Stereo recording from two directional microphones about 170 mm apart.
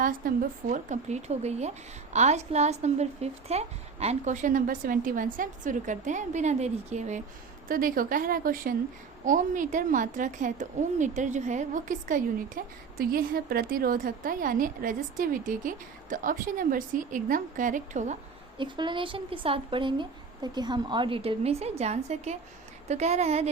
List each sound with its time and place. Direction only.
0.0 s a woman's voice: 55° right (ahead or behind)
7.7 s a woman's voice: 55° right (ahead or behind)
18.5 s a woman's voice: 30° right (ahead or behind)